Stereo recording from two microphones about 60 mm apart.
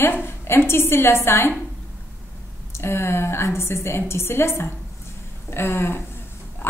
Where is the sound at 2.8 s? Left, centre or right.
Left.